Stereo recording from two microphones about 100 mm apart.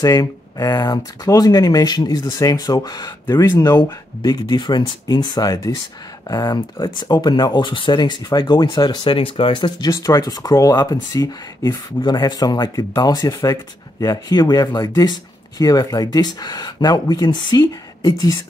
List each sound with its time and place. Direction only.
0.0 s speech: 35° left (ahead or behind); by 9.8 s 55° left (ahead or behind)
9.8 s speech: 30° left (ahead or behind)